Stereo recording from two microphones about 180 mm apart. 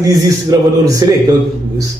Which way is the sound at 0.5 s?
20° right (ahead or behind).